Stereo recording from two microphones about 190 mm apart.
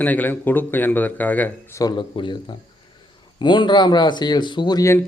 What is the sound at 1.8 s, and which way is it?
Speech, 25° left (ahead or behind).